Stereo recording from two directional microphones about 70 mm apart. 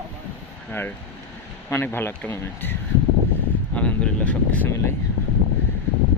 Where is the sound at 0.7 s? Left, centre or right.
Left.